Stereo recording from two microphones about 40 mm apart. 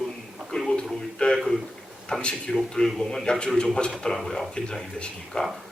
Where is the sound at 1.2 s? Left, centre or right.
Left.